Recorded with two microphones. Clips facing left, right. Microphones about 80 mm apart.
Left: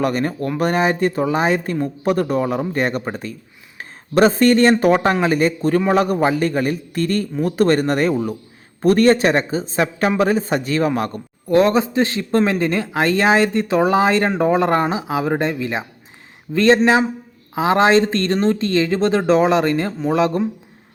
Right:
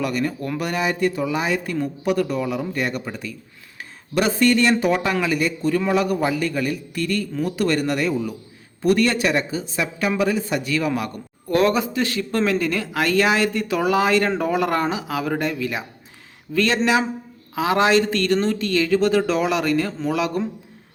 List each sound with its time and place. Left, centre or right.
0.0 s speech: left
3.8 s a sound: left
4.8 s speech: left